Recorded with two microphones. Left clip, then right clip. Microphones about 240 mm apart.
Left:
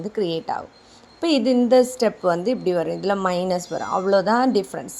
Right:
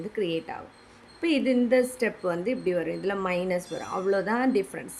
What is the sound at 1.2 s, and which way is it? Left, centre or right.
A woman's voice, left.